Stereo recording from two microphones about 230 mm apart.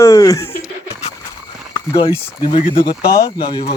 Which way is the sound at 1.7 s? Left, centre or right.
Centre.